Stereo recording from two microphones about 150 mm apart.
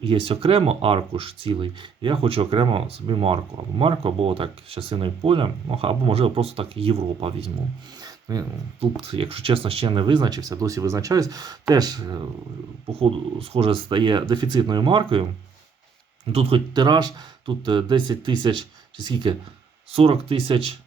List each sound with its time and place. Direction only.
0.0 s speech: 35° right (ahead or behind)
8.0 s a sound: 25° right (ahead or behind)
9.0 s speech: 35° right (ahead or behind)
12.9 s speech: 40° right (ahead or behind)
16.2 s speech: 40° right (ahead or behind)